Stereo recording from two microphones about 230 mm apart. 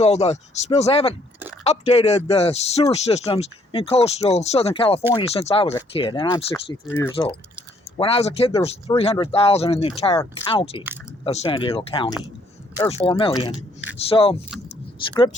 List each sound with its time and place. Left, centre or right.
0.0 s speech: left